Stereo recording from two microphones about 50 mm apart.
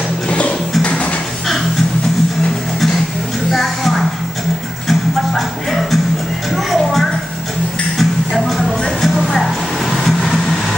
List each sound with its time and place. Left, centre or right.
0.3 s a sound: left
3.5 s music: centre
9.3 s vehicle: centre